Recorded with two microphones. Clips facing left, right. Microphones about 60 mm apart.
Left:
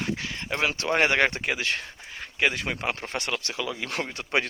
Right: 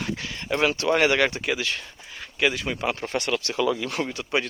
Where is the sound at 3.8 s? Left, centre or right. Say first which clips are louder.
Right 3 dB; left.